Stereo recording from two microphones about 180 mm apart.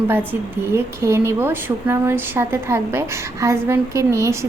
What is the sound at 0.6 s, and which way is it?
A woman's voice, 15° right (ahead or behind).